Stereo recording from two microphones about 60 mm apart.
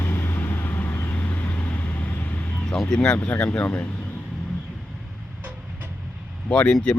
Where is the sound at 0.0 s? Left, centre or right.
Left.